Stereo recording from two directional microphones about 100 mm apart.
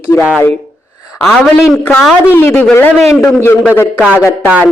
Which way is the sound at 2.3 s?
20° left (ahead or behind).